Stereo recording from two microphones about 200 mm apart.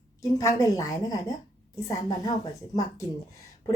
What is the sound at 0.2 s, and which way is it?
A woman's voice, 15° left (ahead or behind).